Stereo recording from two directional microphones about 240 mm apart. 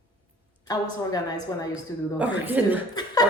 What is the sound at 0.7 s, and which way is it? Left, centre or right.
Speech, centre.